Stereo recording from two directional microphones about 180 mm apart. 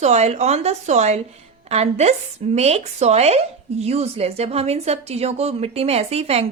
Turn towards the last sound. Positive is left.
turn(degrees=-35)  # may be behind; listen again after turning